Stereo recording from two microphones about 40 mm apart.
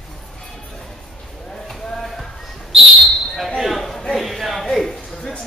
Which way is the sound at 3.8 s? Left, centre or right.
Centre.